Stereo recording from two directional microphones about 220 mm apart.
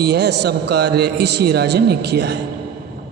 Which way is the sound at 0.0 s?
50° right (ahead or behind).